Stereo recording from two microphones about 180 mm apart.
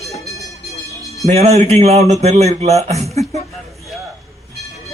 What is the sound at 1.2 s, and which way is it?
A man's voice, 35° right (ahead or behind).